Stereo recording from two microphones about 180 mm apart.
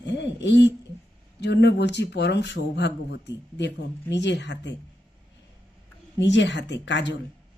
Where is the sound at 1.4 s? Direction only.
70° left (ahead or behind).